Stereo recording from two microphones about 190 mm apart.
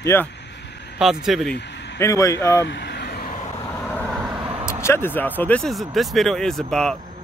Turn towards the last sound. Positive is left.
turn(degrees=5)  # may be behind; listen again after turning